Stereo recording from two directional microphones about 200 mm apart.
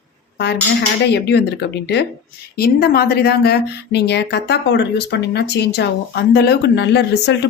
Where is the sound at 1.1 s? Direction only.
55° left (ahead or behind).